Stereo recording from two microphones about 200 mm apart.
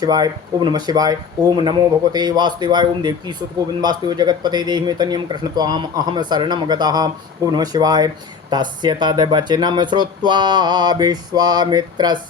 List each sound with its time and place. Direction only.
0.0 s speech: 20° right (ahead or behind)